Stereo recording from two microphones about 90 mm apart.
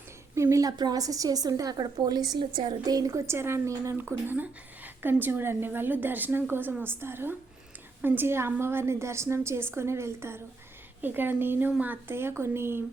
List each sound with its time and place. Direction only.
0.3 s a sound: 35° right (ahead or behind)
0.8 s a woman's voice: 45° right (ahead or behind)
2.4 s a woman's voice: 65° right (ahead or behind)
2.8 s a woman's voice: 45° right (ahead or behind); by 12.8 s 25° right (ahead or behind)